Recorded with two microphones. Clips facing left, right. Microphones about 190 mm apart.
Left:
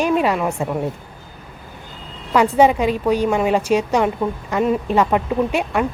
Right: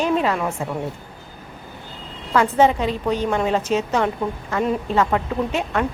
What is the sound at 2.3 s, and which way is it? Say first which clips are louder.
A woman's voice: left 3 dB; 15° left (ahead or behind).